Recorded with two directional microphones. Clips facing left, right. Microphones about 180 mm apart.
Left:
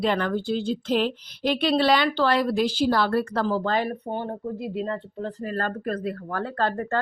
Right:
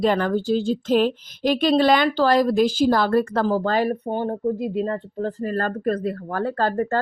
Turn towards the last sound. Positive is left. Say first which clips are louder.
# right 3 dB
turn(degrees=-35)  # may be behind; listen again after turning